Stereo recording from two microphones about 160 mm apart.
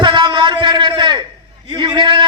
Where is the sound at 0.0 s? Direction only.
30° right (ahead or behind).